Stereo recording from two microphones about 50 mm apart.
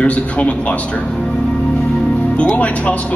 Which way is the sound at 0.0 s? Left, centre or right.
Left.